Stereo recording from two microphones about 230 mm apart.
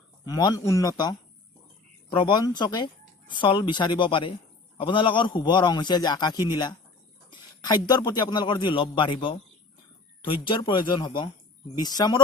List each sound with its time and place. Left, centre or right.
0.3 s a man's voice: centre